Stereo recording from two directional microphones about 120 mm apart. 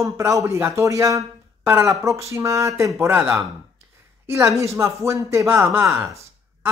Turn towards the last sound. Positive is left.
turn(degrees=-25)  # may be behind; listen again after turning